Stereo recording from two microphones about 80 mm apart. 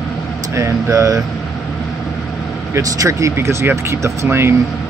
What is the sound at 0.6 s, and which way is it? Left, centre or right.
Speech, right.